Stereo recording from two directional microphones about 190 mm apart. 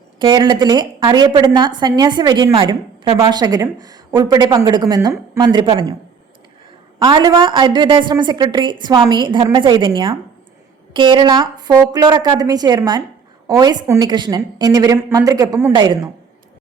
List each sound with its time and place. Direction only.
0.2 s a woman's voice: 25° right (ahead or behind)
7.0 s a woman's voice: 20° right (ahead or behind)